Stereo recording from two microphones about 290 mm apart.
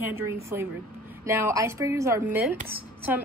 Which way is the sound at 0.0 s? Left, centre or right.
Centre.